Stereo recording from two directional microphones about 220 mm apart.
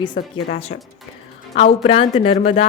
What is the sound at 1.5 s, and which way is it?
A woman's voice, 30° left (ahead or behind).